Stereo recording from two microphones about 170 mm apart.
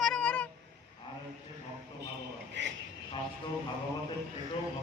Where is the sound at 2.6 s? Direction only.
90° right.